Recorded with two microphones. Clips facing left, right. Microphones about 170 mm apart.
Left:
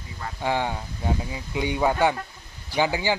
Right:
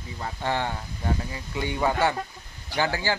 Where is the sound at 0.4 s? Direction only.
10° left (ahead or behind).